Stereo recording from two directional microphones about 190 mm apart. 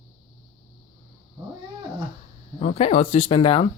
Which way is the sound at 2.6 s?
30° left (ahead or behind).